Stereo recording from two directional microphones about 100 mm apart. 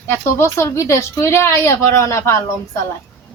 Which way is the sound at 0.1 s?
30° left (ahead or behind).